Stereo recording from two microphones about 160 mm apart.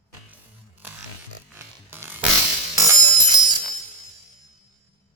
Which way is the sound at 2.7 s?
20° right (ahead or behind).